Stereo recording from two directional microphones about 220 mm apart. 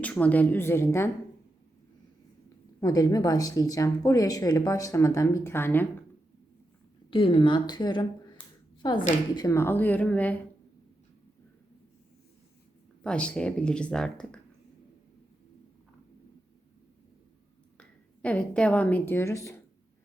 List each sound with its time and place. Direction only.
0.0 s speech: 5° left (ahead or behind)
2.8 s speech: 15° left (ahead or behind)
7.1 s a woman's voice: 25° left (ahead or behind); by 10.4 s 5° left (ahead or behind)
13.0 s speech: 5° left (ahead or behind)
17.7 s a woman's voice: 5° left (ahead or behind)